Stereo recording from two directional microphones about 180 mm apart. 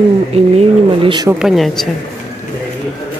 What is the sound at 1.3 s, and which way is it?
Speech, 5° right (ahead or behind).